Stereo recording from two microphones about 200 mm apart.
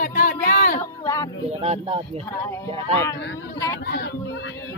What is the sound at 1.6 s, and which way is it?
Speech, 25° right (ahead or behind).